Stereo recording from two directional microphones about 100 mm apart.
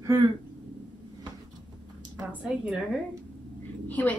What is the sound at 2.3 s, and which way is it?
Speech, 10° right (ahead or behind).